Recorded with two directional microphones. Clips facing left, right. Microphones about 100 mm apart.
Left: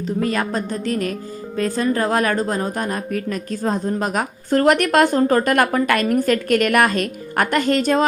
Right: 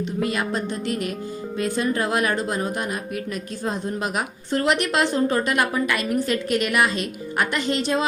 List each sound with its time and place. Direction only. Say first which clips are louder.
0.2 s music: left 3 dB; 40° left (ahead or behind)
1.5 s a woman's voice: left 4 dB; 40° left (ahead or behind)